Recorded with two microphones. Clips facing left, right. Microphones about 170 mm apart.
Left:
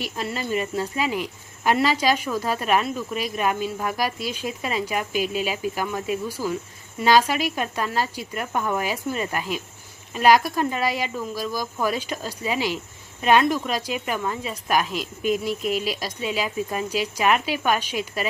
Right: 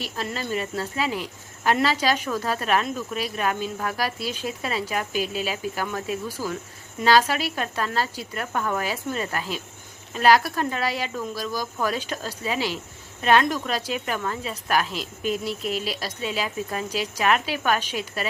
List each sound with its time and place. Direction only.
0.0 s speech: 10° left (ahead or behind)
5.2 s speech: 40° right (ahead or behind)
5.5 s speech: 10° left (ahead or behind)
15.6 s speech: 40° right (ahead or behind)
15.9 s speech: 10° left (ahead or behind)